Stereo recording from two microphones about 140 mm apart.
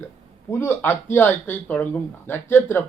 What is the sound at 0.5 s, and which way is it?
Speech, 15° left (ahead or behind).